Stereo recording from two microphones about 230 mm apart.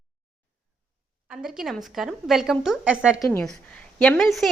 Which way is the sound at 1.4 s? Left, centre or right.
Centre.